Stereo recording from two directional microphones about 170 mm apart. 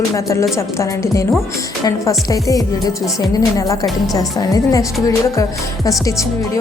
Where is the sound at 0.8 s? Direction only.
20° left (ahead or behind).